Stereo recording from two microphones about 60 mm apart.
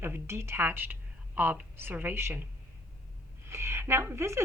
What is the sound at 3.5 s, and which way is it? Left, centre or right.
Speech, right.